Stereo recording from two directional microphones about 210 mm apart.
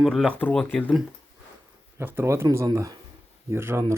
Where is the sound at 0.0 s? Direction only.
Centre (ahead or behind).